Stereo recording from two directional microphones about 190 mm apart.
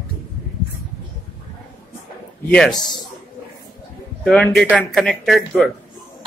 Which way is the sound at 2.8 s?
20° left (ahead or behind).